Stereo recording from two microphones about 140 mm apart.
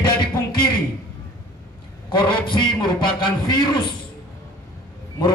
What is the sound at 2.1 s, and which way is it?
A man's voice, 35° left (ahead or behind).